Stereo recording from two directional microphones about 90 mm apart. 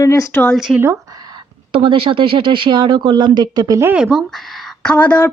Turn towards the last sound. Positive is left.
turn(degrees=15)  # may be behind; listen again after turning